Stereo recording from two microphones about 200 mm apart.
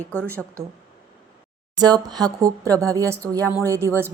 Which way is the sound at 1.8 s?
20° right (ahead or behind).